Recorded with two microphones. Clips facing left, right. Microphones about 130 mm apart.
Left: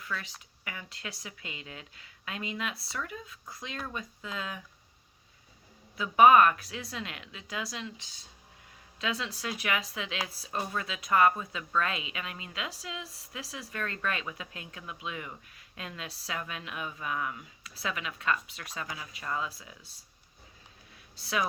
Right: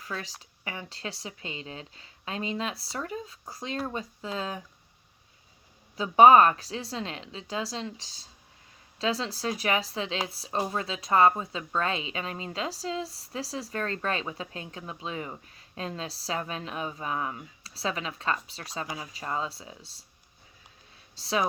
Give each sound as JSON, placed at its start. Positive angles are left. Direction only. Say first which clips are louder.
{"t": 0.0, "sound": "speech", "louder": "right 2 dB", "side_deg": -35}
{"t": 6.0, "sound": "speech", "louder": "right 3 dB", "side_deg": -30}
{"t": 21.2, "sound": "speech", "louder": "right 4 dB", "side_deg": -30}